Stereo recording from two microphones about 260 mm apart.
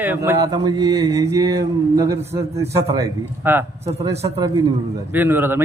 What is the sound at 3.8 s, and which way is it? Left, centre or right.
Speech, right.